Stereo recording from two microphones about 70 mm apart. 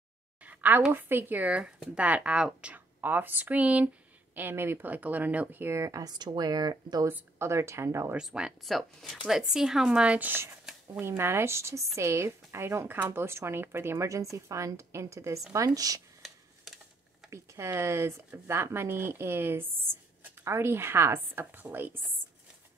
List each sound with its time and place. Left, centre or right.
0.4 s a sound: right
0.9 s speech: right; by 2.7 s centre
2.7 s speech: right
4.4 s speech: right
5.7 s a woman's voice: right
6.0 s speech: right
7.1 s speech: right
8.2 s a woman's voice: centre
8.6 s a woman's voice: centre
10.1 s speech: right
11.0 s a woman's voice: right
15.5 s speech: right
16.2 s a sound: centre
17.3 s speech: right